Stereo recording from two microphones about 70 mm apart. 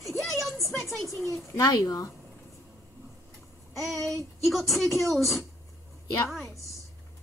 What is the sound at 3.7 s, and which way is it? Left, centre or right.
A woman's voice, centre.